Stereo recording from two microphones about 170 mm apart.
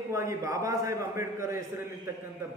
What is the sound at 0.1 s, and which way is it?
A man's voice, 15° right (ahead or behind).